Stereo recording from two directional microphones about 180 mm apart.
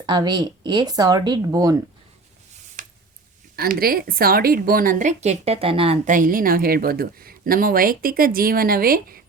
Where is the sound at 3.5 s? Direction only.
55° right (ahead or behind); by 6.0 s 30° right (ahead or behind).